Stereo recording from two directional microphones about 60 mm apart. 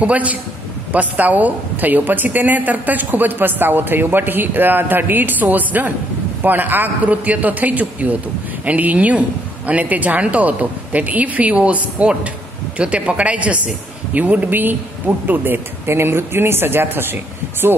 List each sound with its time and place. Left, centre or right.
0.0 s a woman's voice: right